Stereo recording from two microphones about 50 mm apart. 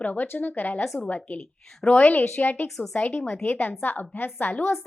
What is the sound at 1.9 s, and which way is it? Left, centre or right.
A woman's voice, left.